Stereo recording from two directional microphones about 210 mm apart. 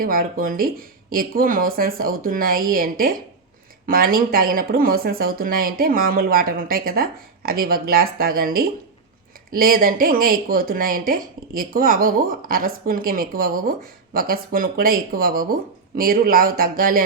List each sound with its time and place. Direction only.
0.0 s speech: 45° right (ahead or behind)